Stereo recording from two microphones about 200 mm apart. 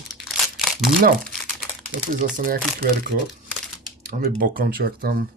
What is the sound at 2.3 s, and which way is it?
Speech, 40° right (ahead or behind).